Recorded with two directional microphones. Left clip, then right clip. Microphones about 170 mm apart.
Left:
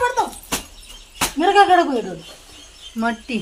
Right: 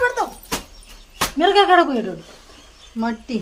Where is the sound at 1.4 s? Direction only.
35° right (ahead or behind).